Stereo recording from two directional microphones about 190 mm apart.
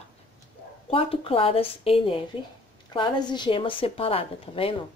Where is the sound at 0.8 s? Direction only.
30° left (ahead or behind).